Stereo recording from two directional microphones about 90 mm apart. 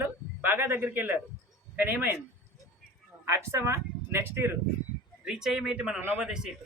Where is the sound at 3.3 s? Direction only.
30° right (ahead or behind).